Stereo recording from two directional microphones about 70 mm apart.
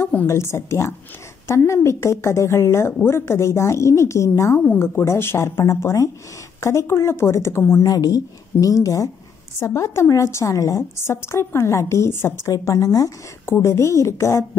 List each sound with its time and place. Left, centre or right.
0.3 s a woman's voice: left
4.6 s a woman's voice: left
7.8 s a woman's voice: left
9.6 s a woman's voice: left
10.8 s a woman's voice: left
12.4 s a woman's voice: left
13.5 s a woman's voice: left